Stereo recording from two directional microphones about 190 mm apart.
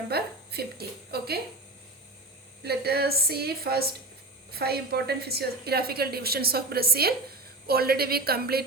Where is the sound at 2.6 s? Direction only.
55° right (ahead or behind).